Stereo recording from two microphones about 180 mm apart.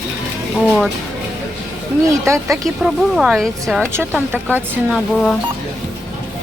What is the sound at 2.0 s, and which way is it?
Speech, 15° right (ahead or behind).